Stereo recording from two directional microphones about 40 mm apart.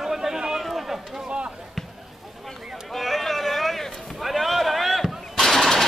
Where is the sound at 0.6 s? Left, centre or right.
Centre.